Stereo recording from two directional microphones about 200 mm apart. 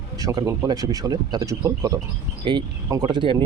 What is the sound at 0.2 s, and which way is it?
Speech, 15° right (ahead or behind).